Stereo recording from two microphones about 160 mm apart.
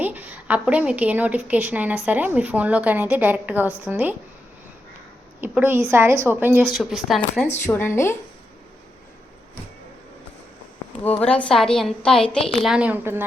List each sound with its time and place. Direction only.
0.0 s a woman's voice: 10° right (ahead or behind)
5.4 s a woman's voice: 15° right (ahead or behind)
6.7 s a woman's voice: centre (ahead or behind)
7.7 s a woman's voice: 15° left (ahead or behind)
11.0 s a woman's voice: 10° left (ahead or behind); by 13.2 s 10° right (ahead or behind)